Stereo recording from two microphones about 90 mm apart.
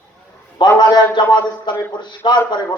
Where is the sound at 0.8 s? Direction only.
50° left (ahead or behind).